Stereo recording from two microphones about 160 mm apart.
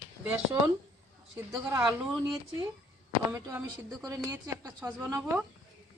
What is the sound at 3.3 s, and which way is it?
Dishes, 15° right (ahead or behind).